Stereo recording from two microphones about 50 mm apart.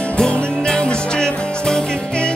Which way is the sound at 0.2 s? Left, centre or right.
Centre.